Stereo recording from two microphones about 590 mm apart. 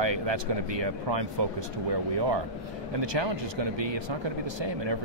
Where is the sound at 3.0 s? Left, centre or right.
Right.